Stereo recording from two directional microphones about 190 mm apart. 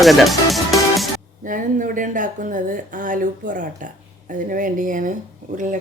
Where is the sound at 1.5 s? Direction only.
45° right (ahead or behind).